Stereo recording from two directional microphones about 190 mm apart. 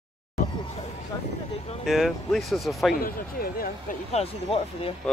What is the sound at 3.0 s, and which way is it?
Speech, 50° left (ahead or behind).